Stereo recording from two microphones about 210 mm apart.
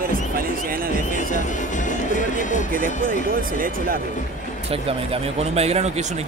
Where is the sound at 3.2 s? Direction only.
40° right (ahead or behind).